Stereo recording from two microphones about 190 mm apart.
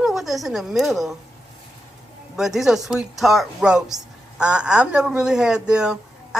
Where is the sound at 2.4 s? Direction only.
Centre (ahead or behind).